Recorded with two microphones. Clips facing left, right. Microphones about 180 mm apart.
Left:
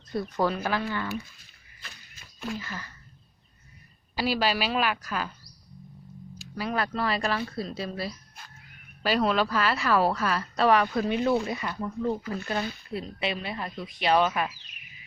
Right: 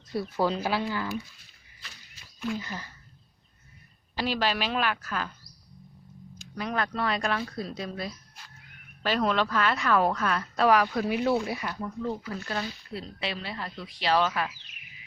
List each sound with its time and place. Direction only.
0.1 s speech: 5° right (ahead or behind)
1.8 s a sound: 45° left (ahead or behind)
2.6 s speech: 15° right (ahead or behind)
4.1 s a woman's voice: 10° left (ahead or behind)
6.5 s a woman's voice: 5° left (ahead or behind)
8.4 s a sound: 55° left (ahead or behind)
9.0 s a woman's voice: 10° left (ahead or behind)
12.9 s speech: 20° left (ahead or behind)